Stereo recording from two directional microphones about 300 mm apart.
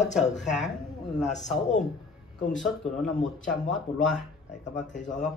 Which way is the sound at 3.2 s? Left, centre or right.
Left.